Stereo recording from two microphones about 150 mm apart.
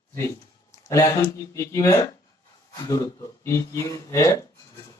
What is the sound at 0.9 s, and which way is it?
Speech, 20° left (ahead or behind).